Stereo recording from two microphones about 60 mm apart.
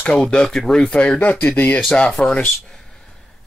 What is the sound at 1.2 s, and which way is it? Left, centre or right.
Speech, left.